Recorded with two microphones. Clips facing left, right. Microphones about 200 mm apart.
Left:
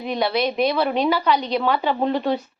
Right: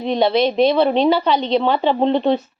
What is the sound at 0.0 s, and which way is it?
A woman's voice, 25° right (ahead or behind).